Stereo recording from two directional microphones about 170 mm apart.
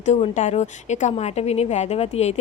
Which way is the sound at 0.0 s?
40° left (ahead or behind).